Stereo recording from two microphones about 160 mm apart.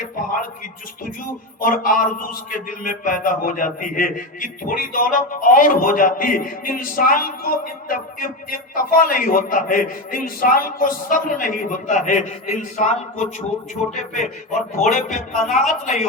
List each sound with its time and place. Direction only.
1.6 s a man's voice: 60° left (ahead or behind)
13.9 s music: 50° left (ahead or behind)